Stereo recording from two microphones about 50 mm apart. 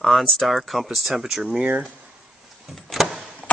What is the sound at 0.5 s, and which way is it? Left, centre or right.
Speech, centre.